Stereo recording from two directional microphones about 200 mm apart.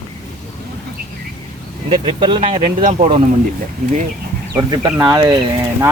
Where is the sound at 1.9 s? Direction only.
25° right (ahead or behind).